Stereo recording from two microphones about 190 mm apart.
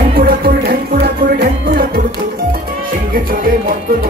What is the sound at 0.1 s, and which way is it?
Music, 50° right (ahead or behind).